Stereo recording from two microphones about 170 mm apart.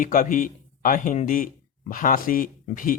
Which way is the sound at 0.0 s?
55° left (ahead or behind).